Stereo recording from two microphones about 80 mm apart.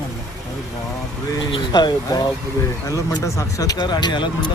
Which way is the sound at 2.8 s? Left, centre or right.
Left.